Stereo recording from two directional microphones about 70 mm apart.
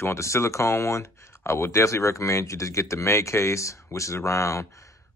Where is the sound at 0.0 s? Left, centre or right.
Left.